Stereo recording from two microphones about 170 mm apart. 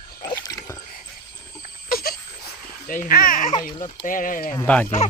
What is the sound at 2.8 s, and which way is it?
Speech, 55° left (ahead or behind).